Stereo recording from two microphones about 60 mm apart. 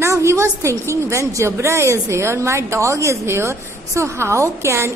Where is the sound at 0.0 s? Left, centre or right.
Right.